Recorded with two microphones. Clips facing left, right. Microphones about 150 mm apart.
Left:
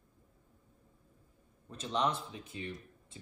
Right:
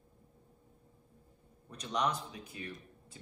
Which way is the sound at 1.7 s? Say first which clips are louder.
Left 1 dB; 25° left (ahead or behind).